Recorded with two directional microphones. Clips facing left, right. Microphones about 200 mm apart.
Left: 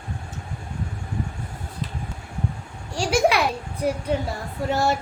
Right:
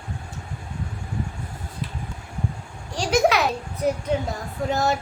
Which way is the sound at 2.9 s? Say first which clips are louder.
Even; 10° left (ahead or behind).